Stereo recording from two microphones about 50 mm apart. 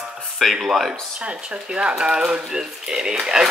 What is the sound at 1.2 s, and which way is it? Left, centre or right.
Speech, right.